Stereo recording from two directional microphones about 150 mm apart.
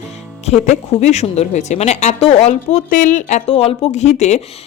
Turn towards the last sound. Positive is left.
turn(degrees=50)  # may be behind; listen again after turning